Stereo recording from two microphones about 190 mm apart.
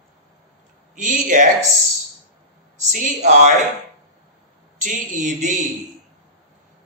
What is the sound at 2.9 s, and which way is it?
Speech, 40° right (ahead or behind).